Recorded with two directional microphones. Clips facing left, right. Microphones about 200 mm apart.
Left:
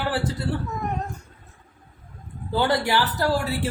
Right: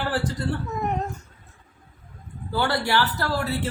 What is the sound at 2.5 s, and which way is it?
Speech, 15° left (ahead or behind).